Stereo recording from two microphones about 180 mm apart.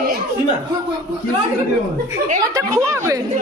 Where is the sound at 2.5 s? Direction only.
15° right (ahead or behind).